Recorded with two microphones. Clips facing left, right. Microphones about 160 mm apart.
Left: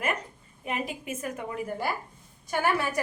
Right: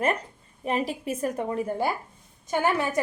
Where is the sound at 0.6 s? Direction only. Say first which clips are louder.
Right 6 dB; 35° right (ahead or behind).